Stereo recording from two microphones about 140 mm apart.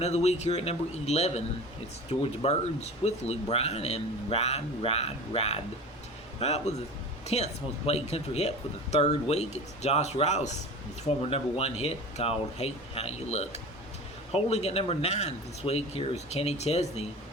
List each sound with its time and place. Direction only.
0.0 s speech: 50° left (ahead or behind)